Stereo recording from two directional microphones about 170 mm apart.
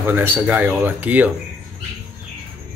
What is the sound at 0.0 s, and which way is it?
Speech, 10° right (ahead or behind).